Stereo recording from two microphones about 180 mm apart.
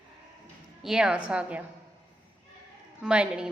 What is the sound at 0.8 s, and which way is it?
Speech, 5° right (ahead or behind).